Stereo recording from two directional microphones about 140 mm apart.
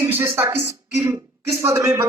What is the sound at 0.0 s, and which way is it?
Speech, 15° right (ahead or behind).